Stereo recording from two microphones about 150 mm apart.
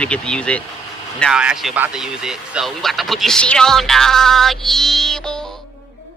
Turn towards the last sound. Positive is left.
turn(degrees=5)  # may be behind; listen again after turning